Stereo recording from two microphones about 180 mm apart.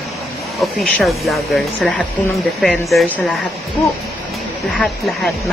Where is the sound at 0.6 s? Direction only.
Centre (ahead or behind).